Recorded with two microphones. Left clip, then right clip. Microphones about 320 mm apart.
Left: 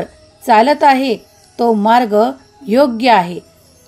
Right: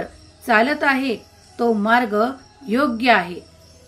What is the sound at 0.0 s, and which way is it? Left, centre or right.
A woman's voice, left.